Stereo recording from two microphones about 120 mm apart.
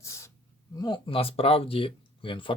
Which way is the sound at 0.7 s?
40° left (ahead or behind).